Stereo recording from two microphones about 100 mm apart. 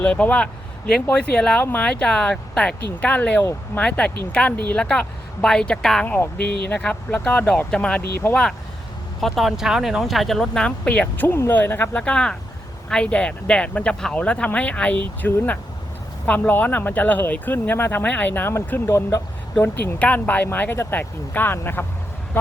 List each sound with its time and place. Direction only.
0.0 s speech: 15° left (ahead or behind)
8.2 s speech: 30° left (ahead or behind)
9.2 s speech: centre (ahead or behind); by 12.0 s 20° left (ahead or behind)
12.0 s speech: 10° left (ahead or behind)